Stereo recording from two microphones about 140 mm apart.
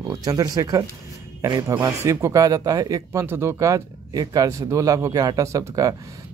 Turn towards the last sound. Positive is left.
turn(degrees=-25)  # may be behind; listen again after turning